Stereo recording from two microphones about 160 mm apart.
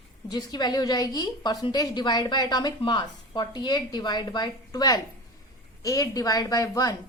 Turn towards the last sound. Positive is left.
turn(degrees=25)  # may be behind; listen again after turning